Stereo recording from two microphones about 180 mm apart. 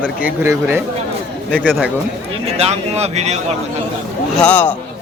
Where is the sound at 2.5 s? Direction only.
35° right (ahead or behind).